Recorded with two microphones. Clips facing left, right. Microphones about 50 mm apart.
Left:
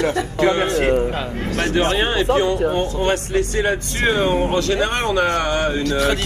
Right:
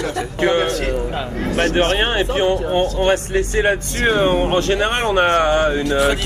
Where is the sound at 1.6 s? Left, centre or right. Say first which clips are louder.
Right 2 dB; right.